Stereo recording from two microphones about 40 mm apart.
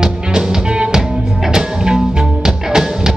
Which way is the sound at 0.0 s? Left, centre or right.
Centre.